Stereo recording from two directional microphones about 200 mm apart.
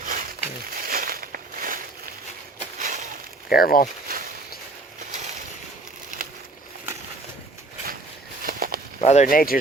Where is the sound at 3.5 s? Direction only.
45° left (ahead or behind).